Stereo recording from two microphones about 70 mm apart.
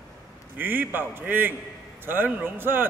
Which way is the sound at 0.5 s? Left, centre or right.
Right.